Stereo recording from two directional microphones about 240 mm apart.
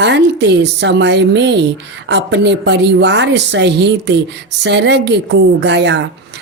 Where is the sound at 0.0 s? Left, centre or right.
Right.